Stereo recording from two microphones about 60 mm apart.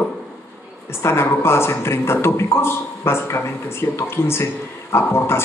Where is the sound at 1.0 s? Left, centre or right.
Left.